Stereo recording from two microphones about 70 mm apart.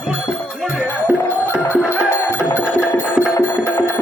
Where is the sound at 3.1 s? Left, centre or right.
Centre.